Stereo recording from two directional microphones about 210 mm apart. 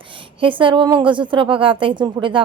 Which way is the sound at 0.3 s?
25° right (ahead or behind).